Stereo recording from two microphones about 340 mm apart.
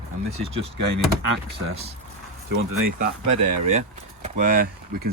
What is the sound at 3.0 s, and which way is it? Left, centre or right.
Speech, right.